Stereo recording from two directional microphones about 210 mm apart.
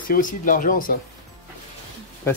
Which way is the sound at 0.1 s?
40° left (ahead or behind).